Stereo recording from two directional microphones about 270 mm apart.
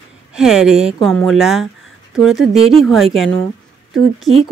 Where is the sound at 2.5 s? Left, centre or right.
Right.